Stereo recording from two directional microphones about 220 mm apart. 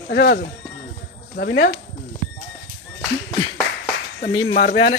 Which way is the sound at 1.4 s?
45° left (ahead or behind).